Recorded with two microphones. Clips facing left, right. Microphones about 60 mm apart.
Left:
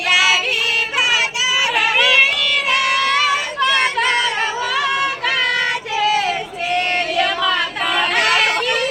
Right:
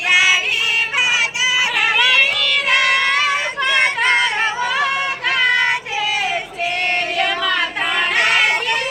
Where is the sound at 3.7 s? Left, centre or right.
Right.